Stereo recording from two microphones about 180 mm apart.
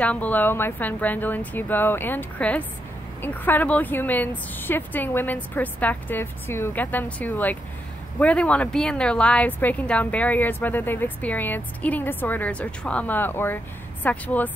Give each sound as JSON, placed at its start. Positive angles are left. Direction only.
{"t": 0.0, "sound": "a woman's voice", "side_deg": 10}